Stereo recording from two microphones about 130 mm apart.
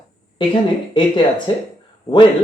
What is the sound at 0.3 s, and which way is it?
Speech, 40° left (ahead or behind).